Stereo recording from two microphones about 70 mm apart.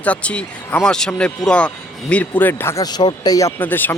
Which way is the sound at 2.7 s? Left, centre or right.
Left.